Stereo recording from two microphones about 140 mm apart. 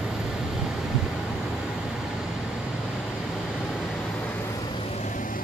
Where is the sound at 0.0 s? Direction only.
Centre (ahead or behind).